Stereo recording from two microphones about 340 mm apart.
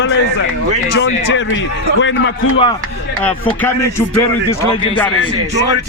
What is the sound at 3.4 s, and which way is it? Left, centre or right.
Speech, centre.